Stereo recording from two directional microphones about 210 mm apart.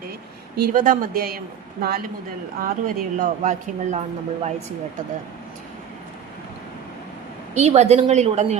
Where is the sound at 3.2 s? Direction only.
35° right (ahead or behind).